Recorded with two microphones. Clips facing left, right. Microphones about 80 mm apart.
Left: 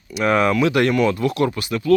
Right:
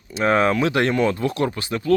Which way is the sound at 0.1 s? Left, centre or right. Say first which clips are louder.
Left 1 dB; right.